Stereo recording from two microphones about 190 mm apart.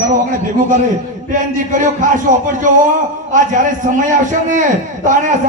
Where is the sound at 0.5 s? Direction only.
45° right (ahead or behind).